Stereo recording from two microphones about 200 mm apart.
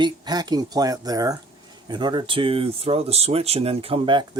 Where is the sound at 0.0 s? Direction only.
20° right (ahead or behind).